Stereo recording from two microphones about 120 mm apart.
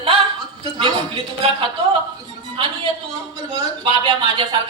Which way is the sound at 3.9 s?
45° right (ahead or behind).